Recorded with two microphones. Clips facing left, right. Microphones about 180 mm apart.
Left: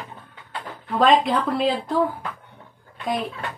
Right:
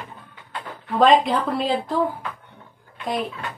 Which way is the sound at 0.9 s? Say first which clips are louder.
Right 1 dB; centre (ahead or behind).